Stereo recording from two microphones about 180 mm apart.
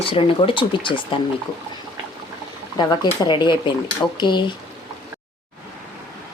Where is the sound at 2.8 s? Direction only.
25° left (ahead or behind).